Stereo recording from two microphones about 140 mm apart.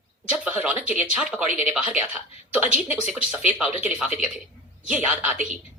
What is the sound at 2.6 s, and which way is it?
Speech, 50° left (ahead or behind).